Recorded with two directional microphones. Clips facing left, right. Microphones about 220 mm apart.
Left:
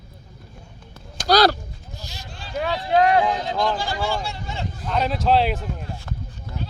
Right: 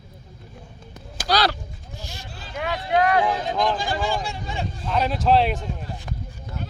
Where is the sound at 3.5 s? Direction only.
20° right (ahead or behind).